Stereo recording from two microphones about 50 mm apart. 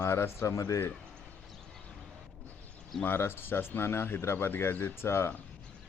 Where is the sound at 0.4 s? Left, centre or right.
Left.